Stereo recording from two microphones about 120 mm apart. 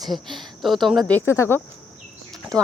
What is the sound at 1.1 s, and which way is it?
Speech, 20° left (ahead or behind).